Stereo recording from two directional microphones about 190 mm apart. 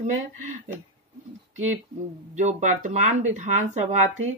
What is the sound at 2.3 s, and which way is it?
Speech, 40° right (ahead or behind).